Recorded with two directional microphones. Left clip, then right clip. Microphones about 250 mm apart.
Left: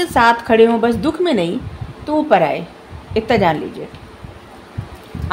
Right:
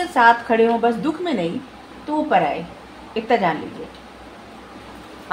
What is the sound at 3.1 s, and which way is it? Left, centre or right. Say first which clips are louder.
Speech: left 7 dB; left.